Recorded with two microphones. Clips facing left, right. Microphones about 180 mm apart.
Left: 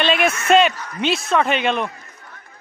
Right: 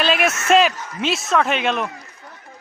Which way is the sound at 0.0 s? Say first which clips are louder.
Left 1 dB; centre (ahead or behind).